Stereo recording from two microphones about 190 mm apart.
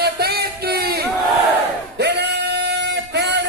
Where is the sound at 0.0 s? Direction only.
55° right (ahead or behind).